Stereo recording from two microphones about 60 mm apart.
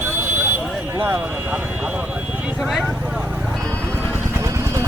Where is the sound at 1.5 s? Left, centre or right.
Right.